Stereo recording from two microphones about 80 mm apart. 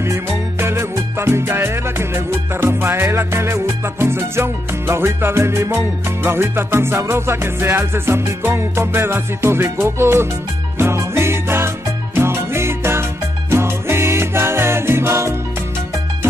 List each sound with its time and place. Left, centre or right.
0.0 s music: right